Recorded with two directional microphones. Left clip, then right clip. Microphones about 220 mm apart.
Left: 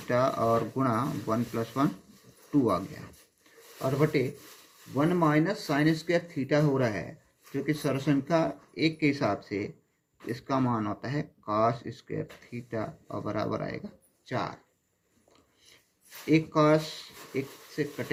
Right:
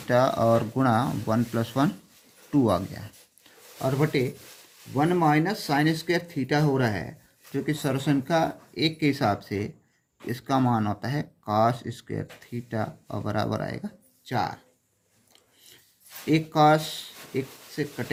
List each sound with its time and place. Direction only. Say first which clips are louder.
0.1 s speech: right 4 dB; 50° right (ahead or behind)
3.8 s speech: right 2 dB; 30° right (ahead or behind)
14.3 s speech: right 5 dB; 30° right (ahead or behind)
16.3 s speech: right 3 dB; 40° right (ahead or behind)